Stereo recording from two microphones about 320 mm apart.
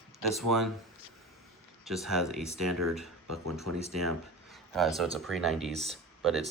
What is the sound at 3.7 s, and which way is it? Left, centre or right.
Speech, right.